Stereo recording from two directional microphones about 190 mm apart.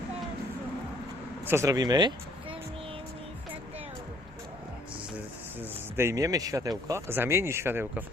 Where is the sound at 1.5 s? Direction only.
15° right (ahead or behind).